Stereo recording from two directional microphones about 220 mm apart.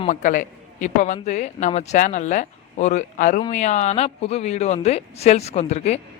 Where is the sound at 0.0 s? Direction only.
35° left (ahead or behind).